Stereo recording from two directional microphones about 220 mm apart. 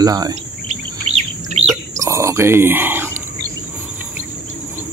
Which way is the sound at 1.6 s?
30° right (ahead or behind).